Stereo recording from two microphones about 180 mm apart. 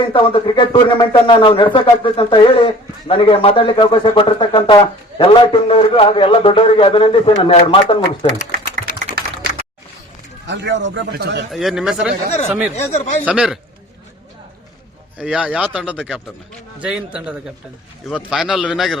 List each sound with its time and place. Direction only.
0.1 s speech: 30° left (ahead or behind)
10.4 s a man's voice: 80° right
11.5 s a man's voice: centre (ahead or behind)
12.7 s speech: 40° left (ahead or behind)
13.2 s speech: 5° right (ahead or behind)
15.2 s a man's voice: 5° right (ahead or behind)